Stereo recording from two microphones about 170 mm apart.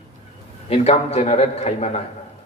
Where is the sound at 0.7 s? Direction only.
35° left (ahead or behind).